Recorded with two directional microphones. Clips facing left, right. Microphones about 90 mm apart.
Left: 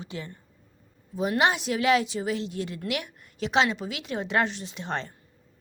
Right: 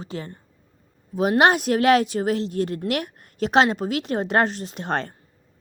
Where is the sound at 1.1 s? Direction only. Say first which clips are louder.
Right 6 dB; 60° right (ahead or behind).